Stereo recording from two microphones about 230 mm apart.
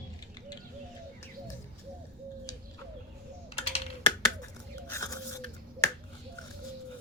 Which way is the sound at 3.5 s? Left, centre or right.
Left.